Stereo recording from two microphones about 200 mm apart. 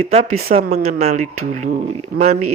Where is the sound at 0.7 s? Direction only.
35° right (ahead or behind).